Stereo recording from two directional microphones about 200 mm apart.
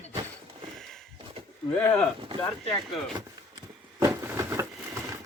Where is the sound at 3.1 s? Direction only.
20° right (ahead or behind).